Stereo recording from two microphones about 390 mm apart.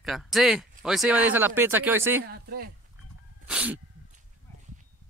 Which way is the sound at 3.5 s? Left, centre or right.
Centre.